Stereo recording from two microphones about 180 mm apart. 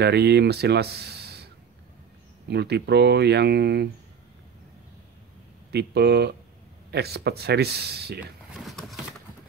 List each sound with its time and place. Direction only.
0.0 s speech: 65° right (ahead or behind)
5.7 s speech: 65° right (ahead or behind)
8.2 s a sound: centre (ahead or behind)